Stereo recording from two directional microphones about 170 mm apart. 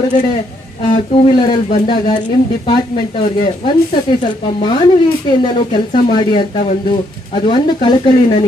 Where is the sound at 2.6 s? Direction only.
30° left (ahead or behind).